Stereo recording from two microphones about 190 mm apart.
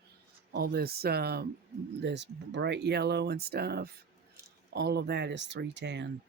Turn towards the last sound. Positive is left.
turn(degrees=-65)  # may be behind; listen again after turning